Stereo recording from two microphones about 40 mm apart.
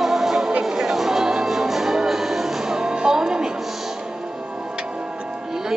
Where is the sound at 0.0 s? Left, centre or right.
Centre.